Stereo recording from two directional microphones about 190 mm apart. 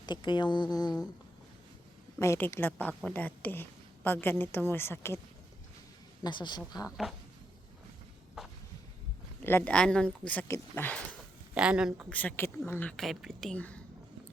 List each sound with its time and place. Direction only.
0.0 s speech: 25° left (ahead or behind)
2.1 s a woman's voice: 15° left (ahead or behind)
6.2 s speech: 25° left (ahead or behind)
8.4 s a sound: 5° right (ahead or behind)
9.4 s a woman's voice: 10° left (ahead or behind)
11.5 s speech: 5° right (ahead or behind)